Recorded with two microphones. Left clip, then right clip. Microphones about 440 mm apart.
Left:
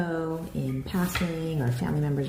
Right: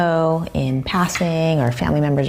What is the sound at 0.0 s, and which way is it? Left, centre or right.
A woman's voice, right.